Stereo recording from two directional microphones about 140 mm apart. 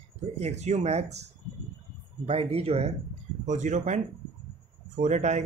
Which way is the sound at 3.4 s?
60° right (ahead or behind).